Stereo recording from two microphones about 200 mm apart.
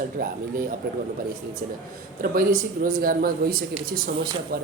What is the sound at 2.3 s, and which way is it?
Speech, 45° right (ahead or behind).